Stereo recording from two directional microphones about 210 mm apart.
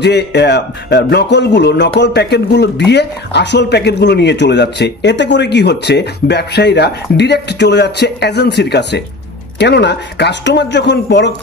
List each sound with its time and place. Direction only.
0.0 s a man's voice: 55° left (ahead or behind)